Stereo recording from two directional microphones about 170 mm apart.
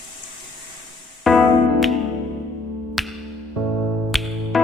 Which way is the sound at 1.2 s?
Centre (ahead or behind).